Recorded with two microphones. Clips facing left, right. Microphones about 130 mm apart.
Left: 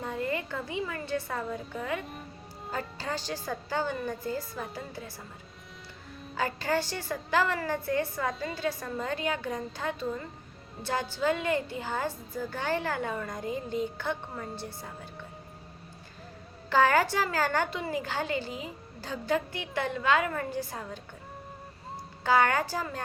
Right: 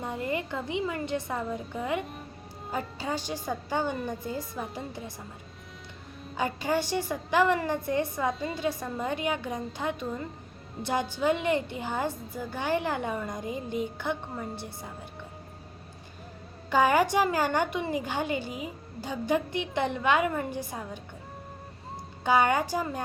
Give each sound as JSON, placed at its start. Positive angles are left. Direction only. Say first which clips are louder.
{"t": 0.0, "sound": "a woman's voice", "louder": "right 1 dB", "side_deg": -20}
{"t": 6.3, "sound": "a woman's voice", "louder": "right 1 dB", "side_deg": -15}
{"t": 11.1, "sound": "a woman's voice", "louder": "right 1 dB", "side_deg": -20}
{"t": 16.6, "sound": "a woman's voice", "louder": "right 1 dB", "side_deg": -15}
{"t": 22.2, "sound": "a woman's voice", "louder": "right 1 dB", "side_deg": -15}